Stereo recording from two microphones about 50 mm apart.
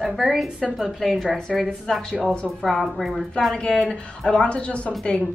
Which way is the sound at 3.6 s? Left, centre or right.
Centre.